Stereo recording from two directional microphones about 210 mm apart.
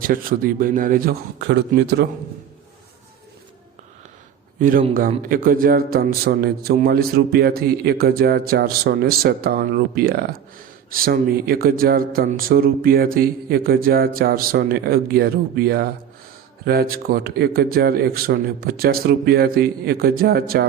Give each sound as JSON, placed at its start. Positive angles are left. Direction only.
{"t": 0.0, "sound": "a man's voice", "side_deg": -45}
{"t": 4.9, "sound": "a man's voice", "side_deg": -40}